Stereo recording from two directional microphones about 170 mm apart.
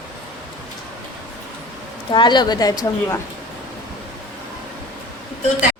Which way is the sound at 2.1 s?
25° left (ahead or behind).